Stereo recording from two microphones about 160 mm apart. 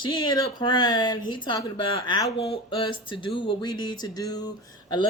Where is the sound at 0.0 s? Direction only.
30° left (ahead or behind).